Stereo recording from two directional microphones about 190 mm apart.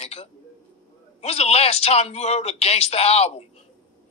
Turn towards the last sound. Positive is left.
turn(degrees=35)  # may be behind; listen again after turning